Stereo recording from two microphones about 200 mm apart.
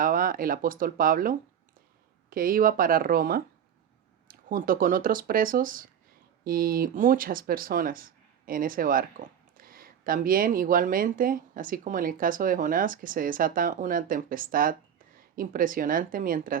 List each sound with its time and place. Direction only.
0.0 s speech: 45° right (ahead or behind)